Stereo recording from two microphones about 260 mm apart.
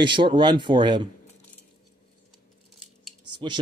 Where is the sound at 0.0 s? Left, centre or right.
Centre.